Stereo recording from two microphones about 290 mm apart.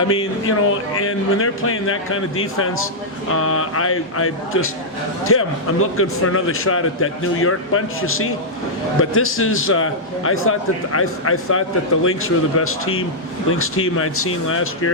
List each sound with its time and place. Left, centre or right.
0.1 s a man's voice: left